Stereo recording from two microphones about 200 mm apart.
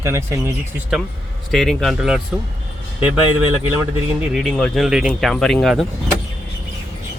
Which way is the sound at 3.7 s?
5° right (ahead or behind).